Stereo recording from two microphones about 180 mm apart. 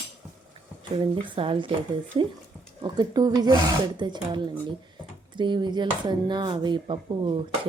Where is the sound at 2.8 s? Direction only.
25° right (ahead or behind).